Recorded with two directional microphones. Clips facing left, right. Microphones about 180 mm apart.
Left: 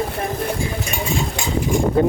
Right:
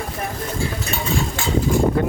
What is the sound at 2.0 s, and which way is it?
Speech, 25° left (ahead or behind).